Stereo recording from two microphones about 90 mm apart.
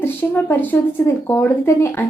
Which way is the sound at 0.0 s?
25° left (ahead or behind).